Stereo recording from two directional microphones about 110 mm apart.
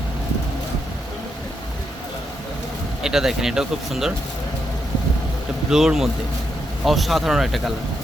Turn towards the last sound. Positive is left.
turn(degrees=-5)  # may be behind; listen again after turning